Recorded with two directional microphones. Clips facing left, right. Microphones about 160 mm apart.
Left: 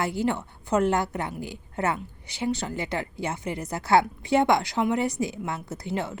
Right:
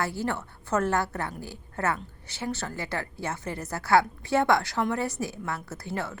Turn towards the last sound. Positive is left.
turn(degrees=20)  # may be behind; listen again after turning